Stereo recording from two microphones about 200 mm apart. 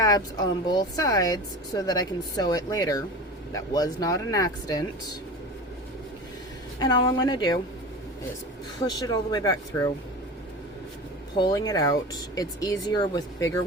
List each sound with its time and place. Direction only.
0.0 s speech: 20° left (ahead or behind)
6.7 s speech: 20° left (ahead or behind)
8.8 s speech: 20° left (ahead or behind)
11.3 s speech: 20° left (ahead or behind)